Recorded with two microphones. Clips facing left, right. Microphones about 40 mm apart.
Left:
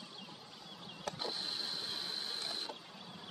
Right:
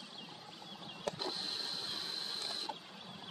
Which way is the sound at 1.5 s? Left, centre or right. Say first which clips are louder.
Even; centre.